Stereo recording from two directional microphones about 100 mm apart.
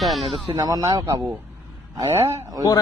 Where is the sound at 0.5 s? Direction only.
40° right (ahead or behind).